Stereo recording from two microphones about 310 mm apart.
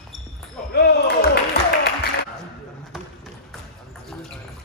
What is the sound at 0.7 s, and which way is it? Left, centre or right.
Basketball bounce, left.